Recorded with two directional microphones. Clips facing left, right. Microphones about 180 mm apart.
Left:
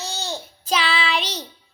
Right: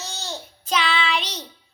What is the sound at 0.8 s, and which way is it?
Child singing, 35° left (ahead or behind).